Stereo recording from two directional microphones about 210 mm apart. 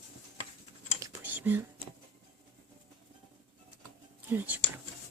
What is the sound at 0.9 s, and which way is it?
Whispering, 15° right (ahead or behind).